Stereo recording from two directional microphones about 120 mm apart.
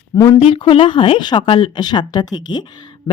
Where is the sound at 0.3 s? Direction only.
50° left (ahead or behind).